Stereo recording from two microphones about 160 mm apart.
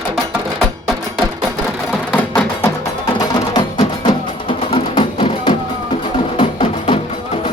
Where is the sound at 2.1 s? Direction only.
10° left (ahead or behind).